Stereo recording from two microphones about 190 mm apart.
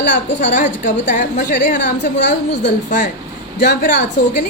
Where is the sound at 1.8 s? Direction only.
65° left (ahead or behind).